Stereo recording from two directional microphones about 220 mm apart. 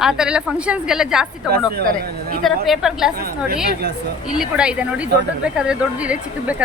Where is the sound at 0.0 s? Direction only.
5° right (ahead or behind).